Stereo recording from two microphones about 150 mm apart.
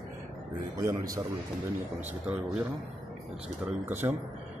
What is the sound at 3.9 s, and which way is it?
Speech, 15° right (ahead or behind).